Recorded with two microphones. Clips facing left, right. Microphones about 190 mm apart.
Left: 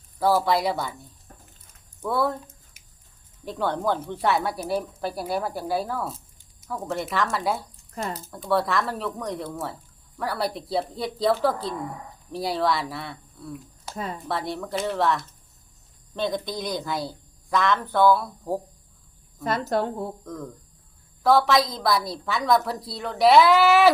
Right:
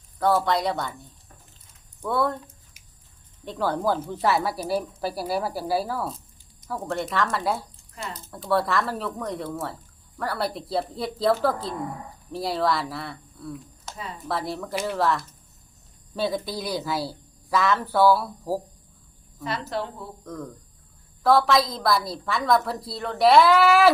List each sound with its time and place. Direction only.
0.2 s speech: 5° left (ahead or behind)
2.0 s speech: centre (ahead or behind)
3.4 s speech: centre (ahead or behind)
7.9 s speech: 35° left (ahead or behind)
8.3 s speech: centre (ahead or behind)
13.9 s speech: 50° left (ahead or behind)
14.3 s speech: centre (ahead or behind)
19.5 s a woman's voice: 45° left (ahead or behind)
20.2 s speech: centre (ahead or behind)